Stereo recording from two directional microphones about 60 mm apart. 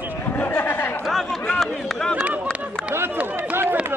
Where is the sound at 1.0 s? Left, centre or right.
Centre.